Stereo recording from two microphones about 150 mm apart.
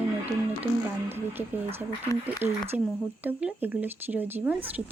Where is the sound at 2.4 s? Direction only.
15° right (ahead or behind).